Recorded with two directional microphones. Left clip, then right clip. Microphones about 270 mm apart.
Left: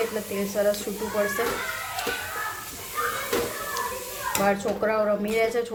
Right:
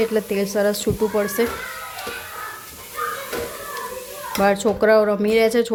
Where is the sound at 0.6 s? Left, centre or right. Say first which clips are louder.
Right 3 dB; right.